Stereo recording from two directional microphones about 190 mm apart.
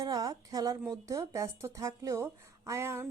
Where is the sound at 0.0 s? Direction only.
20° right (ahead or behind).